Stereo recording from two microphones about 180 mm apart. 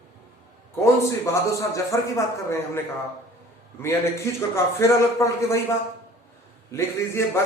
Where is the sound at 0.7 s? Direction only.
15° left (ahead or behind).